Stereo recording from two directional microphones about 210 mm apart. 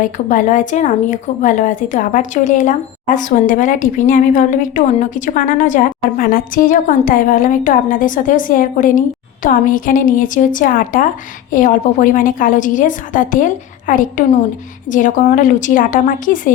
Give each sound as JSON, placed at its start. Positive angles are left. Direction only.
{"t": 0.0, "sound": "a woman's voice", "side_deg": 40}